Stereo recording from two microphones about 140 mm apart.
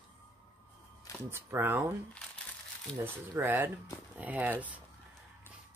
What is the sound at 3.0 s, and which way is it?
Speech, 15° right (ahead or behind).